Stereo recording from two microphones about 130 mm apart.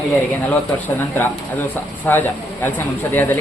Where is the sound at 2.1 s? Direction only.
15° left (ahead or behind).